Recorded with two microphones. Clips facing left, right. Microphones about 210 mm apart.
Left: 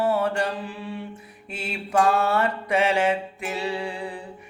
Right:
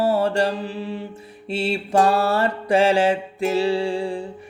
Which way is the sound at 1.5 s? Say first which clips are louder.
Right 6 dB; 30° right (ahead or behind).